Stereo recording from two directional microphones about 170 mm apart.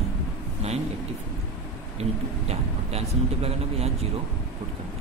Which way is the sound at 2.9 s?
35° right (ahead or behind).